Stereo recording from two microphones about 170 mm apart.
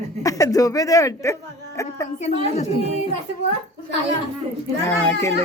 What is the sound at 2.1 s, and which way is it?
Speech, 40° left (ahead or behind).